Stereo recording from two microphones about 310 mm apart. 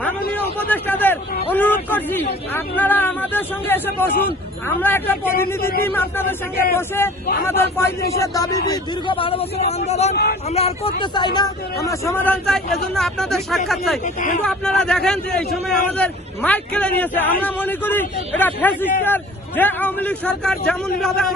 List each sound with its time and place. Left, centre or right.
0.7 s speech: centre
5.5 s speech: left
5.8 s speech: centre
14.0 s speech: left
14.4 s speech: centre